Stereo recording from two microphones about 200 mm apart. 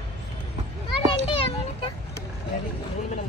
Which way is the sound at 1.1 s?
25° left (ahead or behind).